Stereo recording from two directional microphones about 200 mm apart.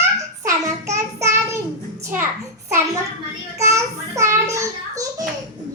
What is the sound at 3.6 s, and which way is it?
Child singing, 15° right (ahead or behind).